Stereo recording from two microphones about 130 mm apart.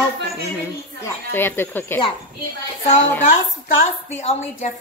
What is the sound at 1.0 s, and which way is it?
Speech, 15° left (ahead or behind).